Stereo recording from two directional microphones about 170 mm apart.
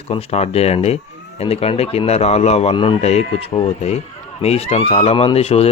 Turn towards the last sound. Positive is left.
turn(degrees=35)  # may be behind; listen again after turning